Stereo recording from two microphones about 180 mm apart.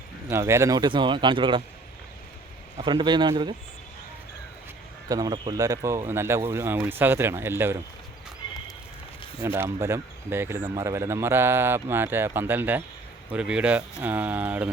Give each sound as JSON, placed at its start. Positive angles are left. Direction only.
{"t": 0.3, "sound": "speech", "side_deg": -15}
{"t": 2.7, "sound": "speech", "side_deg": -25}
{"t": 5.0, "sound": "speech", "side_deg": -20}
{"t": 9.4, "sound": "speech", "side_deg": -15}